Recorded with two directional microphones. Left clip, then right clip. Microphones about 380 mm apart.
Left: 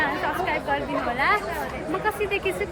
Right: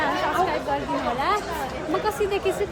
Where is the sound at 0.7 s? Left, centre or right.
Centre.